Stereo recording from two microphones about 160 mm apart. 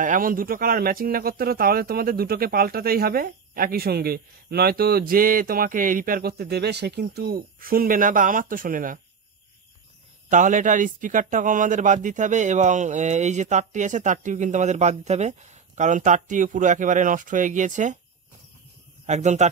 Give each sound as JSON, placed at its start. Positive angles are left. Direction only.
{"t": 0.0, "sound": "speech", "side_deg": -60}
{"t": 10.3, "sound": "speech", "side_deg": -55}
{"t": 19.0, "sound": "speech", "side_deg": -45}